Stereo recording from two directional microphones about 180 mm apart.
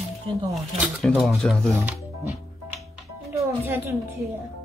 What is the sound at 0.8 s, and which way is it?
Speech, centre (ahead or behind).